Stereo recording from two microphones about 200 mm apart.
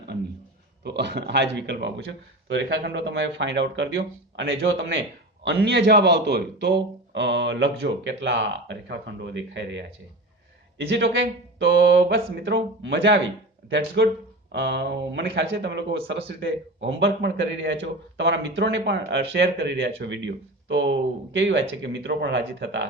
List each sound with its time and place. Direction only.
0.9 s a man's voice: 55° right (ahead or behind)
5.5 s a man's voice: 55° right (ahead or behind)